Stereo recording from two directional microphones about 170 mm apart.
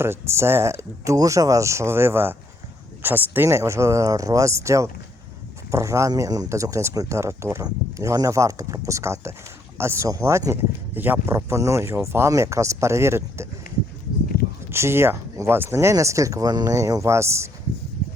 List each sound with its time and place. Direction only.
0.0 s speech: 15° right (ahead or behind)
14.7 s speech: 15° right (ahead or behind)